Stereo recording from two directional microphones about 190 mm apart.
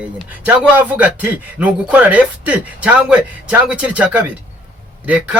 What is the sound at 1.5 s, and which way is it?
Speech, 5° right (ahead or behind).